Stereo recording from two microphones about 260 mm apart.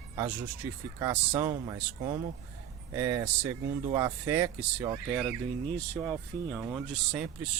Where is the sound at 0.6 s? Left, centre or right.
Centre.